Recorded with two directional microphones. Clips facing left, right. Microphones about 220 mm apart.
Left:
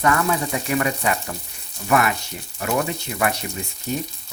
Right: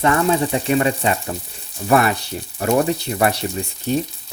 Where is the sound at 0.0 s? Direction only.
30° right (ahead or behind).